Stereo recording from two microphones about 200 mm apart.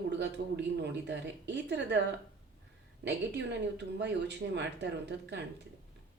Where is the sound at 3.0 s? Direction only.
60° right (ahead or behind).